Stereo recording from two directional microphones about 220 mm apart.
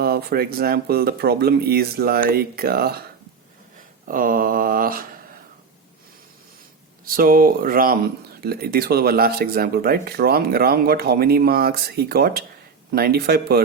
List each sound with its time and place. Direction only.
0.0 s speech: 45° right (ahead or behind)
4.0 s speech: 40° right (ahead or behind)
7.0 s speech: 40° right (ahead or behind)